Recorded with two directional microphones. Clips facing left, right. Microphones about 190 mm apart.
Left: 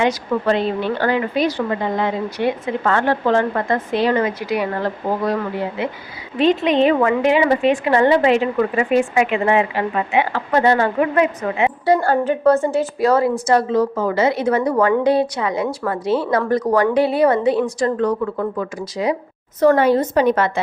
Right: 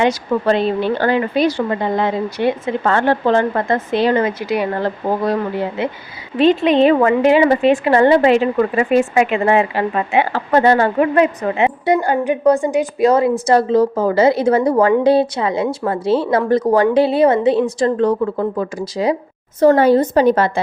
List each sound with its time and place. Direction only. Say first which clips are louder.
0.4 s a woman's voice: right 3 dB; 30° right (ahead or behind)
6.4 s a woman's voice: right 3 dB; 30° right (ahead or behind)
11.9 s a woman's voice: left 2 dB; 15° right (ahead or behind)
13.5 s a woman's voice: right 4 dB; 30° right (ahead or behind)